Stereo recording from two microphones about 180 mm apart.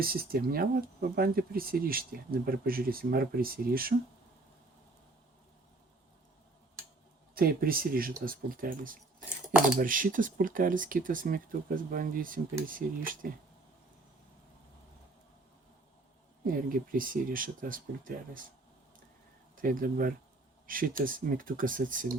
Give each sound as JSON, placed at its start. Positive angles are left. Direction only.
{"t": 0.0, "sound": "speech", "side_deg": -55}
{"t": 7.3, "sound": "speech", "side_deg": -55}
{"t": 16.6, "sound": "speech", "side_deg": -50}
{"t": 19.5, "sound": "speech", "side_deg": -50}